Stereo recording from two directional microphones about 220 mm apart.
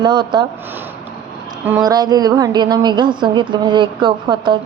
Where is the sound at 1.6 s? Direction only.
10° right (ahead or behind).